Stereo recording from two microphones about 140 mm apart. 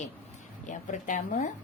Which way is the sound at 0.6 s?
65° left (ahead or behind).